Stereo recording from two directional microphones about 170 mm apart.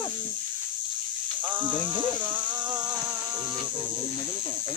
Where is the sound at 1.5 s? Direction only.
10° right (ahead or behind).